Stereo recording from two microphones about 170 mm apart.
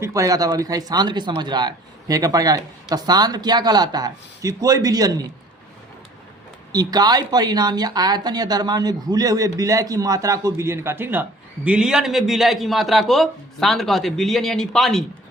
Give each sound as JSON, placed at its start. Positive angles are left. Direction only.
{"t": 0.0, "sound": "speech", "side_deg": -20}
{"t": 6.7, "sound": "speech", "side_deg": -25}